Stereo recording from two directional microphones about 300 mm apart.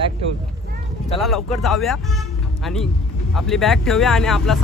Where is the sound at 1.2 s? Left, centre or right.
Centre.